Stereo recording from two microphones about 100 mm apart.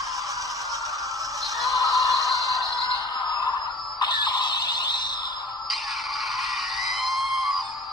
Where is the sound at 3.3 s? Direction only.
45° left (ahead or behind).